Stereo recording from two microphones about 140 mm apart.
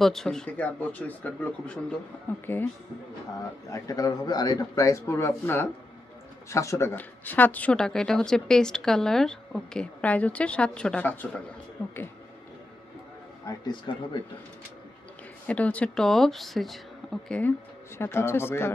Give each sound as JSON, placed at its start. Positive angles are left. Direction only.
{"t": 0.0, "sound": "speech", "side_deg": 5}
{"t": 3.7, "sound": "speech", "side_deg": 25}
{"t": 13.5, "sound": "speech", "side_deg": 30}
{"t": 15.4, "sound": "speech", "side_deg": 10}